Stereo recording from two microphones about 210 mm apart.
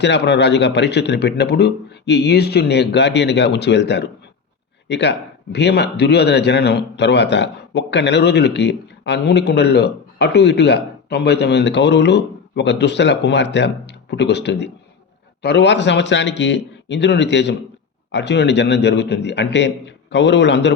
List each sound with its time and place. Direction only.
0.0 s a man's voice: 55° left (ahead or behind)